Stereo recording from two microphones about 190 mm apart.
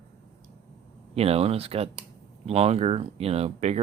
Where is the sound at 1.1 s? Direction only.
30° right (ahead or behind).